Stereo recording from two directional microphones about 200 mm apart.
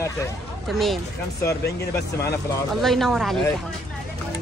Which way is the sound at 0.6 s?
Centre (ahead or behind).